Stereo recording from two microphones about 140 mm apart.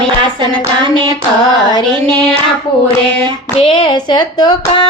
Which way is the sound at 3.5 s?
40° left (ahead or behind).